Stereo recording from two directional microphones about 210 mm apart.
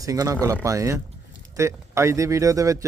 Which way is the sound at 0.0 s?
15° right (ahead or behind).